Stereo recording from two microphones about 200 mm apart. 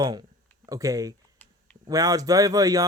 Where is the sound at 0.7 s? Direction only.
15° right (ahead or behind).